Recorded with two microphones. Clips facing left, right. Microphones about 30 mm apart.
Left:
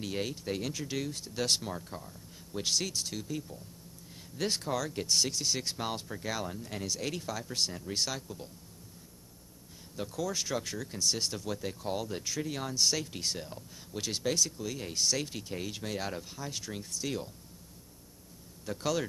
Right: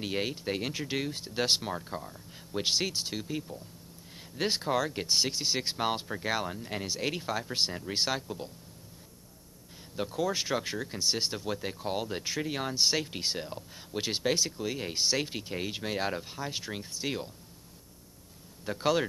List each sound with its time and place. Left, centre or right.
0.0 s speech: right
9.9 s speech: right
18.7 s speech: right